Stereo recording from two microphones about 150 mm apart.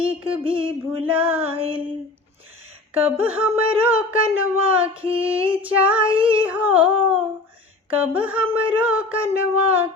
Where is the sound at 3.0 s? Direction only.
10° right (ahead or behind).